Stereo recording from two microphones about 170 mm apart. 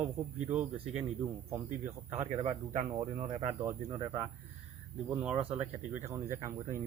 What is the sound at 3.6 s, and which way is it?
Speech, 25° right (ahead or behind).